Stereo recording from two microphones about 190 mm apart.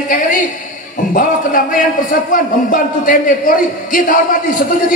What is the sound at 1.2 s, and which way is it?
A man's voice, 45° left (ahead or behind).